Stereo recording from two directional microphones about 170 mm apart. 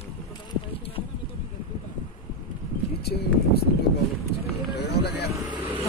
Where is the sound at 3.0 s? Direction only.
70° left (ahead or behind).